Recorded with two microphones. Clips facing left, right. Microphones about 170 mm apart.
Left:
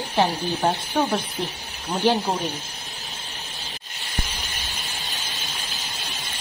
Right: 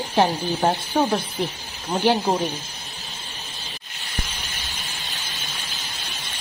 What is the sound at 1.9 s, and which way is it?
Speech, 10° right (ahead or behind).